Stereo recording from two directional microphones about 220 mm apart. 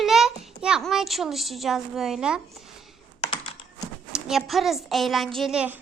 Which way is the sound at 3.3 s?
25° left (ahead or behind).